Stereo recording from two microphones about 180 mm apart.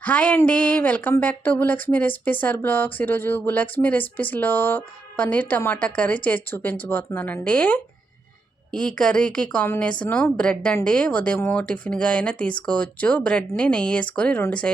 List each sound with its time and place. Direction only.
0.0 s a woman's voice: 10° left (ahead or behind)